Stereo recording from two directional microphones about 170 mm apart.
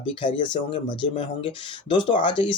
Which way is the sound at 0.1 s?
30° left (ahead or behind).